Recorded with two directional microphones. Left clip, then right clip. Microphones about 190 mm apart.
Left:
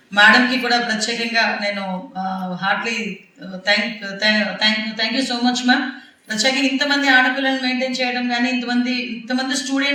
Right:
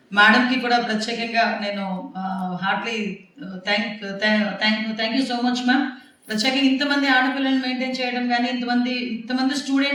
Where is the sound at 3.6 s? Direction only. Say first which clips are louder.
Left 5 dB; 35° right (ahead or behind).